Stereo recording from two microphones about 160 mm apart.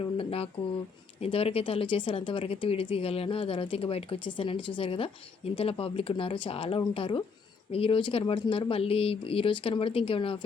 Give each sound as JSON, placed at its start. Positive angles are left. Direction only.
{"t": 0.2, "sound": "speech", "side_deg": 35}